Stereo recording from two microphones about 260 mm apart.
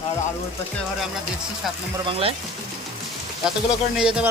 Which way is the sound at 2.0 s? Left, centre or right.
Right.